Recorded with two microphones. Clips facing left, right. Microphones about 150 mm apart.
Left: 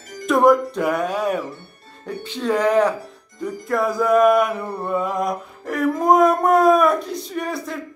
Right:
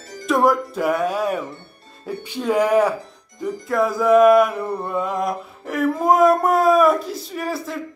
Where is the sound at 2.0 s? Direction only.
10° right (ahead or behind).